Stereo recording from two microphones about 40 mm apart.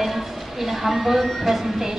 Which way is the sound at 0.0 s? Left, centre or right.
Centre.